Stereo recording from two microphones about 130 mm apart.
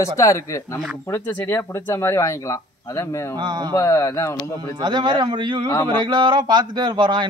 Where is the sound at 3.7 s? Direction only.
25° left (ahead or behind).